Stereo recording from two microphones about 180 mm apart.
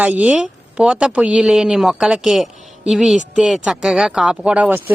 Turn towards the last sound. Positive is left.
turn(degrees=-5)  # may be behind; listen again after turning